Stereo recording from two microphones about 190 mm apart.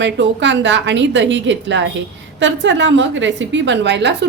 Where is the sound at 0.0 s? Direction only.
70° right (ahead or behind).